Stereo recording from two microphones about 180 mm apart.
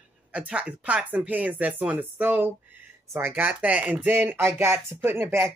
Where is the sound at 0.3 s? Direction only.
5° right (ahead or behind).